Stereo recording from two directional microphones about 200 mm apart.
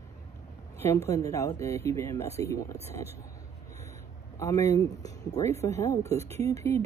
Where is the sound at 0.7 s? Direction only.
15° left (ahead or behind).